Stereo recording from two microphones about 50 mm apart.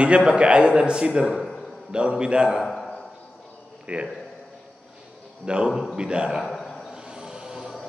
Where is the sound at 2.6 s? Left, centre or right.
Centre.